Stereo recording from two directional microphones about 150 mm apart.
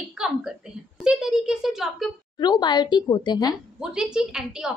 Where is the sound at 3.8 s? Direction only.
5° right (ahead or behind).